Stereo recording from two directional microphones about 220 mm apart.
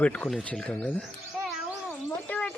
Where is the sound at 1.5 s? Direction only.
5° left (ahead or behind).